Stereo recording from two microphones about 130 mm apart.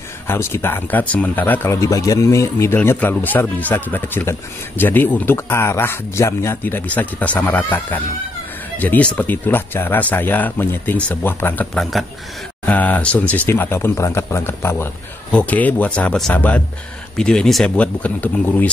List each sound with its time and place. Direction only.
0.3 s speech: 20° left (ahead or behind)
11.7 s a man's voice: centre (ahead or behind)
12.6 s speech: 10° left (ahead or behind)